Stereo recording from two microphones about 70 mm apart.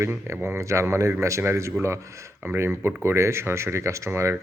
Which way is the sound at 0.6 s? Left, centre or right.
Right.